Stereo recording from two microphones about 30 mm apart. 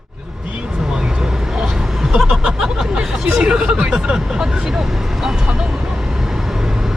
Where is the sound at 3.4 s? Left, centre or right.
Right.